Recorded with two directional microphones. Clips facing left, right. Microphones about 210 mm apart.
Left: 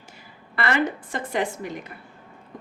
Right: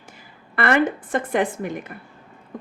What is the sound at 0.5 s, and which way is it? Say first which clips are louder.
Speech: right 4 dB; 55° right (ahead or behind).